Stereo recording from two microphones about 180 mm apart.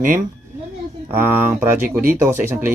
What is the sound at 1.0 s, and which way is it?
Speech, 10° right (ahead or behind).